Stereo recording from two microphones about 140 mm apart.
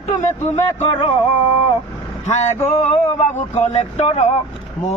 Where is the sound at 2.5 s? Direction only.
55° left (ahead or behind).